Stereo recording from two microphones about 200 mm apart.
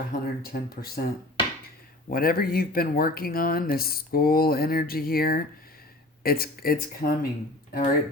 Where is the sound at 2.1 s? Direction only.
45° left (ahead or behind).